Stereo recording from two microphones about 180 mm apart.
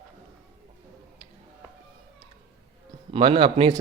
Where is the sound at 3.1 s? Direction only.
30° right (ahead or behind).